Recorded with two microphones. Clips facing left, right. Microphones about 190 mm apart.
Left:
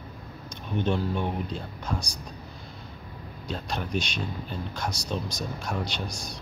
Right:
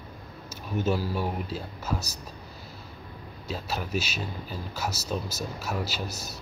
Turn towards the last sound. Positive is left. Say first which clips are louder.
# even
turn(degrees=-5)  # may be behind; listen again after turning